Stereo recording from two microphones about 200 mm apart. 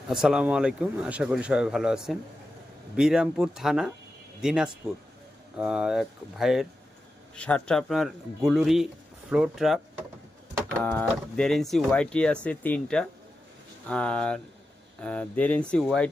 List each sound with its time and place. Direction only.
0.1 s speech: 5° right (ahead or behind)